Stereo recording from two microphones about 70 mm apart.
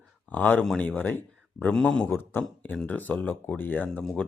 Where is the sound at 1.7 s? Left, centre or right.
Centre.